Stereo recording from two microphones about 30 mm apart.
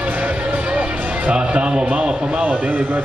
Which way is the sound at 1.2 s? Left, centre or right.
Right.